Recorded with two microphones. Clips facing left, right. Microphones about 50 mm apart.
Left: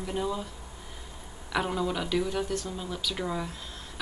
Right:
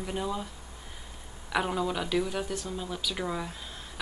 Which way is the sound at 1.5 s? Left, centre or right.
Centre.